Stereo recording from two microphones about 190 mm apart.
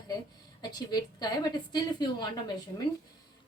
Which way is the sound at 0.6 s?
20° left (ahead or behind).